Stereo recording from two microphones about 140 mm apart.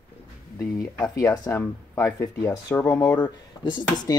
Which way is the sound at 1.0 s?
25° left (ahead or behind).